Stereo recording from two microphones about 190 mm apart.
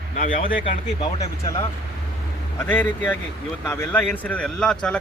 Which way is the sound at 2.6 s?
10° left (ahead or behind).